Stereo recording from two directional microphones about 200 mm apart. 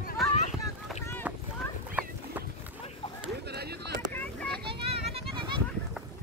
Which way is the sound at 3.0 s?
25° left (ahead or behind).